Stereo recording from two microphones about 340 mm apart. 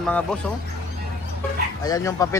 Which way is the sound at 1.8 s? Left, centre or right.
Centre.